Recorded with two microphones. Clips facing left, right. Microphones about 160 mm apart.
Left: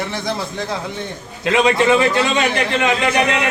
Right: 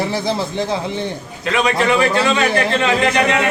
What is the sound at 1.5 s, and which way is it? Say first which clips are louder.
Speech: left 2 dB; 25° left (ahead or behind).